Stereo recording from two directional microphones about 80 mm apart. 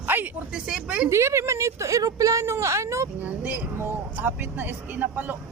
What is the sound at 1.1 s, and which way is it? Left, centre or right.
A woman's voice, right.